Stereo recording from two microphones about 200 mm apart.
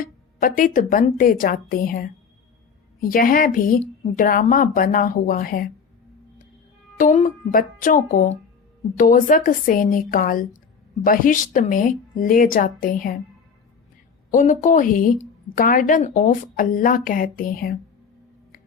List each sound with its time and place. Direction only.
0.0 s a woman's voice: 45° left (ahead or behind)
6.9 s a woman's voice: 45° left (ahead or behind)
14.3 s a woman's voice: 40° left (ahead or behind)